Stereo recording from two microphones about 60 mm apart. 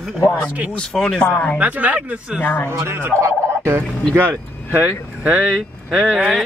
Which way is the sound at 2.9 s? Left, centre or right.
Right.